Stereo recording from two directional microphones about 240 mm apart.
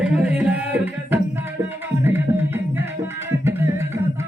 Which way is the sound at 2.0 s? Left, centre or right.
Centre.